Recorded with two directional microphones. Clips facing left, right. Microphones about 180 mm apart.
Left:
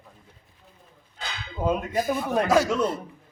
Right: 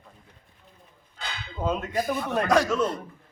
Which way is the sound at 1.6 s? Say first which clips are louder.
Left 2 dB; 10° left (ahead or behind).